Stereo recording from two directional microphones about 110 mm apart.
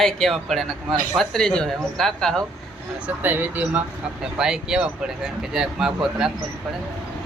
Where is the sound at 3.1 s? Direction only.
15° right (ahead or behind).